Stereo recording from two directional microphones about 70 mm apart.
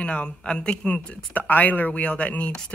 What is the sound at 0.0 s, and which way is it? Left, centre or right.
Speech, centre.